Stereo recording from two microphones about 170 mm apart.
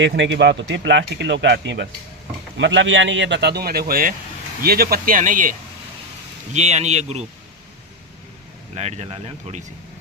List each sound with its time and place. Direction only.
0.0 s speech: 90° right; by 7.3 s 40° right (ahead or behind)
8.7 s speech: 40° right (ahead or behind)